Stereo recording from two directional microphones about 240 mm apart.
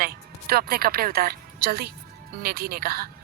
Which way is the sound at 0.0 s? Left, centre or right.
Right.